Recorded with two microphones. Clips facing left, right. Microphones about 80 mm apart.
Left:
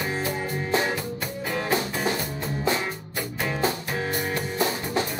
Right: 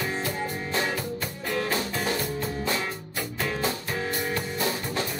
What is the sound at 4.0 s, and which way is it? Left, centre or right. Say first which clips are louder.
Music: left 2 dB; centre.